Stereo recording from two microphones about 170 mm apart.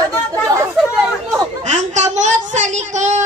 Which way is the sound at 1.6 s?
45° right (ahead or behind).